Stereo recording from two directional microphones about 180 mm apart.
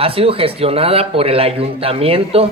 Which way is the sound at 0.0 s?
30° right (ahead or behind).